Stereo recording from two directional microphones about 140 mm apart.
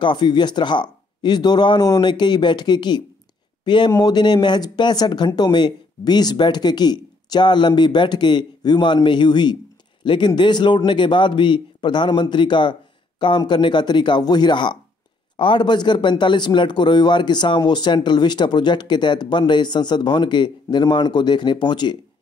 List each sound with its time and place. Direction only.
0.0 s a man's voice: 35° left (ahead or behind)